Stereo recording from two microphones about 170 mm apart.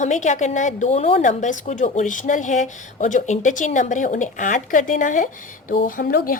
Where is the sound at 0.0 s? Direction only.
45° left (ahead or behind).